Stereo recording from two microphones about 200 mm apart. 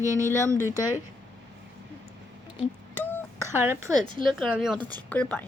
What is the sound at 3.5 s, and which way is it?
Speech, 10° right (ahead or behind).